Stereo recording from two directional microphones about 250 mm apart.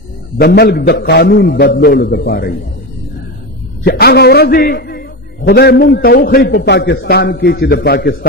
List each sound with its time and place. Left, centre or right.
0.3 s a man's voice: left
3.8 s a man's voice: left